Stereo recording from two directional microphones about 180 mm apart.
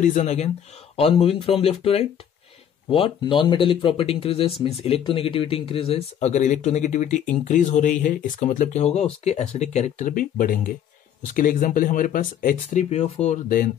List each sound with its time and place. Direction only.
0.2 s speech: 35° left (ahead or behind)
12.9 s speech: 40° left (ahead or behind)